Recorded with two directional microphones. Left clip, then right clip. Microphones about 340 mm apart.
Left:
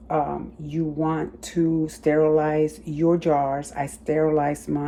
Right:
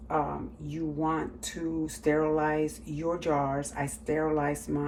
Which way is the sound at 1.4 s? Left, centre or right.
Left.